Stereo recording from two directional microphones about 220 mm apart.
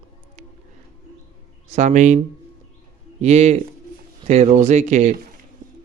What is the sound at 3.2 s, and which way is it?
Speech, 30° right (ahead or behind).